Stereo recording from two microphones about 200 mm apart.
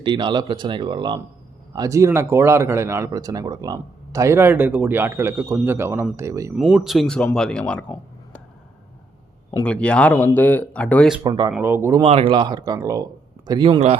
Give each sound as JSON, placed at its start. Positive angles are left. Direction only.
{"t": 0.0, "sound": "speech", "side_deg": -25}
{"t": 6.6, "sound": "speech", "side_deg": 0}
{"t": 9.5, "sound": "speech", "side_deg": 10}
{"t": 11.2, "sound": "speech", "side_deg": -20}
{"t": 12.0, "sound": "speech", "side_deg": -30}